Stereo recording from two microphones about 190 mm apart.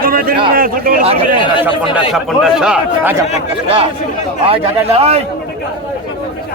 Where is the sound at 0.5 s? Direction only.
50° right (ahead or behind).